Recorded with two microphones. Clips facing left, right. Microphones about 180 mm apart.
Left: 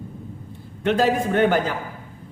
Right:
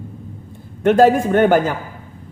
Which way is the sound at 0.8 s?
50° right (ahead or behind).